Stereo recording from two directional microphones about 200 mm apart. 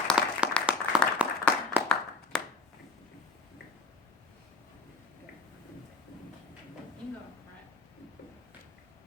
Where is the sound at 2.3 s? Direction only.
5° left (ahead or behind).